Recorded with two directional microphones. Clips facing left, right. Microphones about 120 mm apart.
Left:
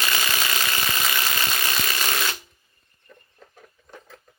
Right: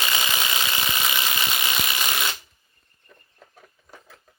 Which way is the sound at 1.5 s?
15° right (ahead or behind).